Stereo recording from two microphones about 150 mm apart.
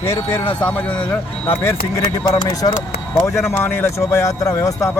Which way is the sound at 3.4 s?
15° left (ahead or behind).